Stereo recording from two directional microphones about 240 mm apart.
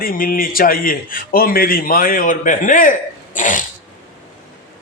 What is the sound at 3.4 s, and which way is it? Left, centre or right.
Sneeze, left.